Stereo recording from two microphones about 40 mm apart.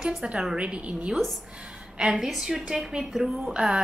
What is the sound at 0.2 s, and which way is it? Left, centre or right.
Speech, centre.